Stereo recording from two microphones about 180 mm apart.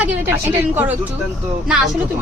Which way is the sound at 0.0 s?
10° right (ahead or behind).